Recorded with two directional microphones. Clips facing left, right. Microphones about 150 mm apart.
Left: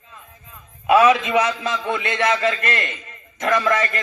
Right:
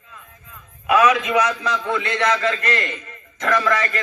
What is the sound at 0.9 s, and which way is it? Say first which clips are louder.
A man's voice: left 2 dB; 25° left (ahead or behind).